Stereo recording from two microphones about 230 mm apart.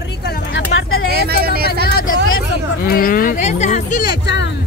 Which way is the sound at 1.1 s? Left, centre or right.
Right.